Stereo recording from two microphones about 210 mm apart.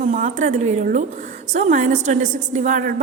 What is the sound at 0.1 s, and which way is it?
A woman's voice, 35° right (ahead or behind).